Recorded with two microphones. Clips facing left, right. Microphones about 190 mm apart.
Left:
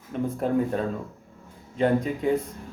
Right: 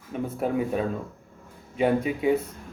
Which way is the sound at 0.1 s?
10° right (ahead or behind).